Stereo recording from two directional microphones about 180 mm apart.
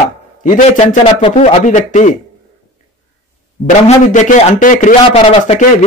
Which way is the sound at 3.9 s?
45° left (ahead or behind).